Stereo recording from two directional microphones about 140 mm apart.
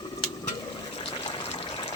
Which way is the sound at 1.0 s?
40° left (ahead or behind).